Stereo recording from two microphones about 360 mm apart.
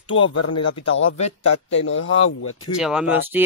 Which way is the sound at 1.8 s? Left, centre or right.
Left.